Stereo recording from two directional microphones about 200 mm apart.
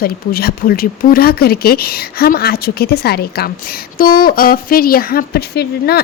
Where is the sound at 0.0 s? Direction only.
50° left (ahead or behind).